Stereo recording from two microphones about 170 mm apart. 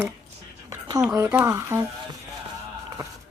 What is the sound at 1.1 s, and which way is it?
Speech, 15° right (ahead or behind).